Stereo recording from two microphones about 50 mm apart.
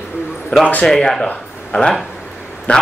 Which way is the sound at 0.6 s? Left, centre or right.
Left.